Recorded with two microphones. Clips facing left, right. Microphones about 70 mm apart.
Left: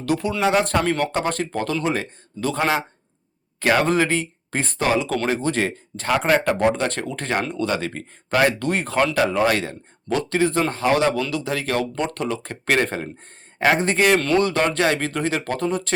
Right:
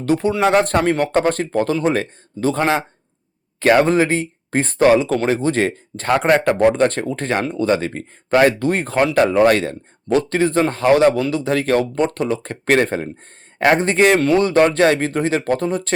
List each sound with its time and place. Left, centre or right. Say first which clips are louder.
0.0 s speech: right 5 dB; right
0.4 s speech: right 3 dB; right
14.2 s speech: right 4 dB; centre
14.4 s speech: right 6 dB; right